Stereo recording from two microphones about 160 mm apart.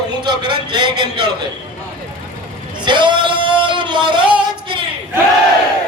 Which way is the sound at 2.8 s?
30° right (ahead or behind).